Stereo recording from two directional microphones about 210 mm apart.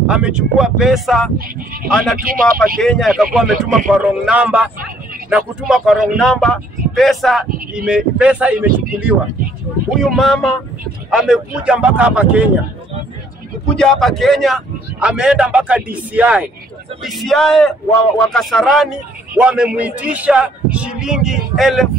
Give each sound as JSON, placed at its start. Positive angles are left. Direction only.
{"t": 0.1, "sound": "a man's voice", "side_deg": -5}
{"t": 2.1, "sound": "speech", "side_deg": -45}
{"t": 2.8, "sound": "a man's voice", "side_deg": 0}
{"t": 13.7, "sound": "a man's voice", "side_deg": 5}